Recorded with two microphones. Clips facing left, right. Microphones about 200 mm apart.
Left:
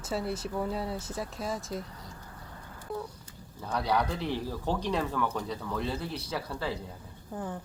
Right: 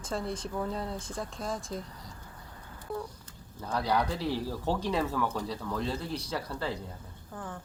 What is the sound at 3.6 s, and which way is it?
Speech, centre (ahead or behind).